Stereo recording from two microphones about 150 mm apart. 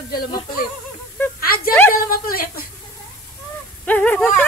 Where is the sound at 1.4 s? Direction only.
80° left.